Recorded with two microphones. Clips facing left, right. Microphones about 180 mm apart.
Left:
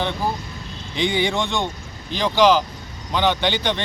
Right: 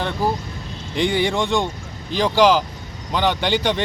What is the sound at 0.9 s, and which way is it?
Speech, centre (ahead or behind).